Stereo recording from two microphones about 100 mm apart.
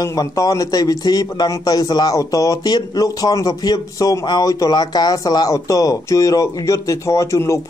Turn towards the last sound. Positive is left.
turn(degrees=30)  # may be behind; listen again after turning